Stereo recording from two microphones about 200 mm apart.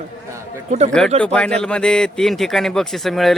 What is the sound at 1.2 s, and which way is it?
A man's voice, 5° left (ahead or behind).